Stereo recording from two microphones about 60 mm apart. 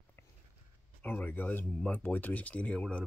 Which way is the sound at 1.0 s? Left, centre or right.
Left.